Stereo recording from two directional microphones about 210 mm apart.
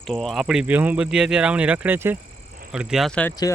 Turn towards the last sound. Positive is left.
turn(degrees=5)  # may be behind; listen again after turning